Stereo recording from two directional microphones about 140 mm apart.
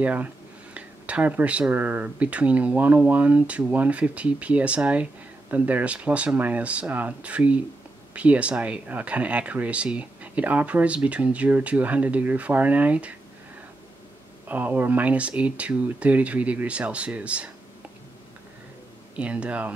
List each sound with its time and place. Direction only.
0.0 s speech: 10° right (ahead or behind)
14.5 s speech: 10° right (ahead or behind)
19.1 s speech: 10° right (ahead or behind)